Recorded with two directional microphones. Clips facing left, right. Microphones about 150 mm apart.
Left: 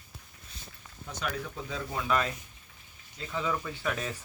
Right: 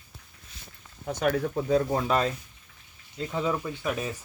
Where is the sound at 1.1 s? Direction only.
50° right (ahead or behind).